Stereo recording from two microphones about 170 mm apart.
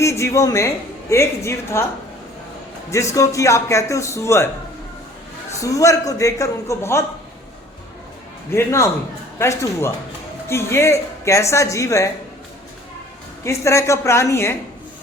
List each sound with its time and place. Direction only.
0.0 s a woman's voice: 15° left (ahead or behind)
3.2 s a woman's voice: 15° left (ahead or behind)
5.5 s a man's voice: 20° left (ahead or behind)
8.5 s a woman's voice: 15° left (ahead or behind)
13.4 s a woman's voice: 15° left (ahead or behind)